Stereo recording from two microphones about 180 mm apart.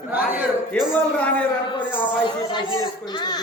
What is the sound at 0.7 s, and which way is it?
Speech, 5° left (ahead or behind).